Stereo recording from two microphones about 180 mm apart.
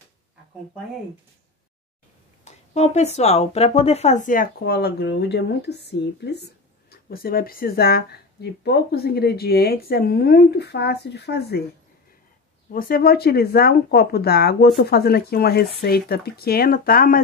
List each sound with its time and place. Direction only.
2.4 s speech: 40° left (ahead or behind); by 11.6 s 65° left (ahead or behind)
12.7 s speech: 55° left (ahead or behind)